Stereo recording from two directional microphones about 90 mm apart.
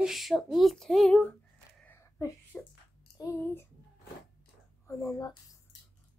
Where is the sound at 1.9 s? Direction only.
35° left (ahead or behind).